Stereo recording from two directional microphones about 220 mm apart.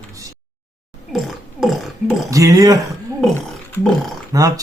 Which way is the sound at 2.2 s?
15° right (ahead or behind).